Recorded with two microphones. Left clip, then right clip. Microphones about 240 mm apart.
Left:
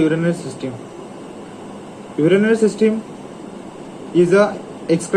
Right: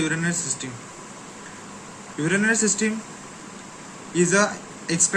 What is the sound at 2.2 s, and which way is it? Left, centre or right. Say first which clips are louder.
Speech: left 8 dB; right.